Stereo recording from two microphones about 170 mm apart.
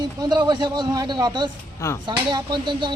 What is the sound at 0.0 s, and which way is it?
A man's voice, 25° right (ahead or behind).